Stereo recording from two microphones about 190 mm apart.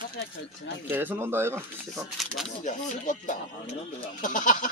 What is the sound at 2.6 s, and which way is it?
Speech, 40° left (ahead or behind).